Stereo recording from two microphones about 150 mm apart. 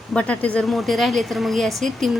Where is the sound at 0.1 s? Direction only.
10° left (ahead or behind).